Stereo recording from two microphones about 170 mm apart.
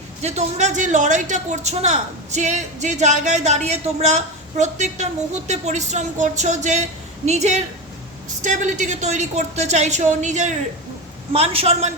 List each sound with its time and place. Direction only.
0.2 s a woman's voice: 40° right (ahead or behind)